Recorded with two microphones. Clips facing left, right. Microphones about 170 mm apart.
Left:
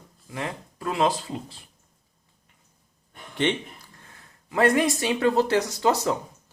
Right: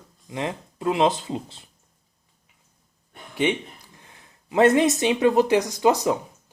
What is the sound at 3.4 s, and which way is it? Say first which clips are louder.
Speech: right 2 dB; 10° right (ahead or behind).